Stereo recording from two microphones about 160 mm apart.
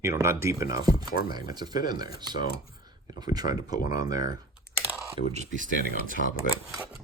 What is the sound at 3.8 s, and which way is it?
Speech, 55° left (ahead or behind).